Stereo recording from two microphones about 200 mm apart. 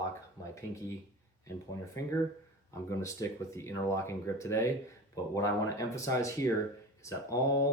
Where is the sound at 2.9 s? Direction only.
15° left (ahead or behind).